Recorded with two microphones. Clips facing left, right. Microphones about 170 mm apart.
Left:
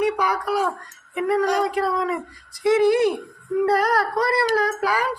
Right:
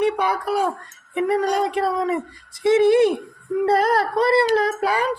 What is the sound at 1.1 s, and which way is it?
Speech, 25° right (ahead or behind).